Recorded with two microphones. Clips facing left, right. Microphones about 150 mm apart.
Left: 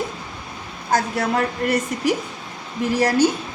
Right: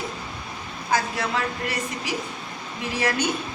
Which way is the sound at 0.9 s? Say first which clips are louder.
Left 4 dB; 45° left (ahead or behind).